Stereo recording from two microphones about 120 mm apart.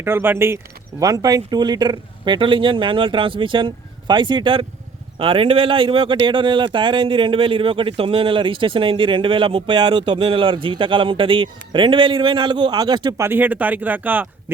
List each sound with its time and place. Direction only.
0.0 s speech: 20° right (ahead or behind); by 13.1 s 35° right (ahead or behind)
13.1 s speech: 20° right (ahead or behind)